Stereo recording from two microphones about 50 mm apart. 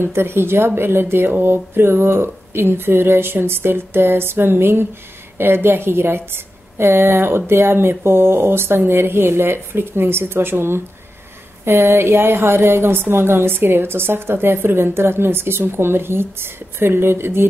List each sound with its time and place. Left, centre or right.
0.0 s a woman's voice: right